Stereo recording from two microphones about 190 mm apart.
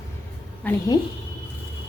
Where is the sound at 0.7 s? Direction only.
10° left (ahead or behind).